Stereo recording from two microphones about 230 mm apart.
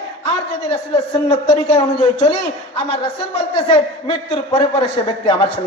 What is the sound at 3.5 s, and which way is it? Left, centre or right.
A man's voice, left.